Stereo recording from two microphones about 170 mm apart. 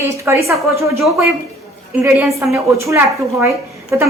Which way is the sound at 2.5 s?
15° right (ahead or behind).